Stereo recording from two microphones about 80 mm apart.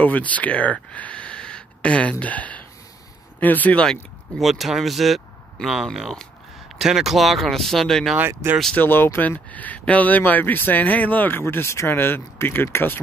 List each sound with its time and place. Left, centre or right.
0.0 s speech: centre
4.4 s speech: centre
8.2 s speech: right
8.7 s speech: left